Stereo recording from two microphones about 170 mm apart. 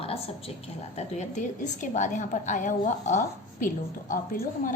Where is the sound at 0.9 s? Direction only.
45° left (ahead or behind).